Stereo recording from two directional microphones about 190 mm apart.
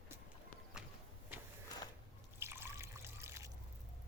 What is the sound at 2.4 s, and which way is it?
Trickle, 15° right (ahead or behind).